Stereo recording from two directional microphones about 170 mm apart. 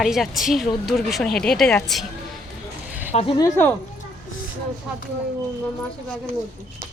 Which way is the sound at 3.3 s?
20° left (ahead or behind).